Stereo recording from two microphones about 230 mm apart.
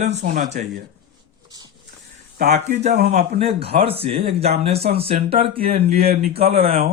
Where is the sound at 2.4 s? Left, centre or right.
Right.